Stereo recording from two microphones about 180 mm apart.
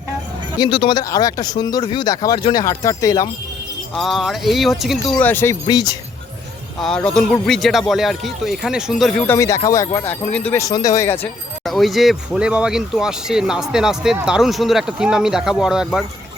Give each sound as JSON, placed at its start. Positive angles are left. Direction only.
{"t": 0.6, "sound": "speech", "side_deg": 30}
{"t": 3.9, "sound": "speech", "side_deg": 0}
{"t": 6.7, "sound": "speech", "side_deg": 5}
{"t": 11.6, "sound": "speech", "side_deg": 0}